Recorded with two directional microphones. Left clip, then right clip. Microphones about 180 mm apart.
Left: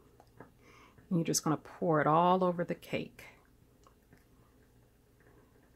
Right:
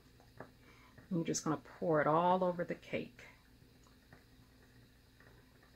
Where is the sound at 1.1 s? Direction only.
45° left (ahead or behind).